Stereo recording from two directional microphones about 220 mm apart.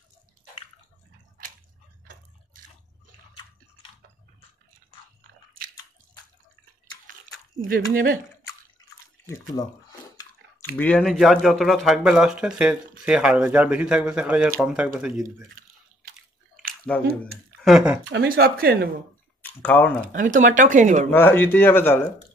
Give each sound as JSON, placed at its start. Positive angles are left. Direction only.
{"t": 7.6, "sound": "speech", "side_deg": -40}
{"t": 10.8, "sound": "speech", "side_deg": 5}
{"t": 16.9, "sound": "speech", "side_deg": 5}
{"t": 18.1, "sound": "speech", "side_deg": -45}
{"t": 19.4, "sound": "speech", "side_deg": 10}
{"t": 20.1, "sound": "speech", "side_deg": -35}
{"t": 21.1, "sound": "speech", "side_deg": 10}